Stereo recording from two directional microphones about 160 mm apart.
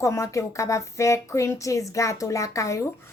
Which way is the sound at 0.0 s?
20° left (ahead or behind).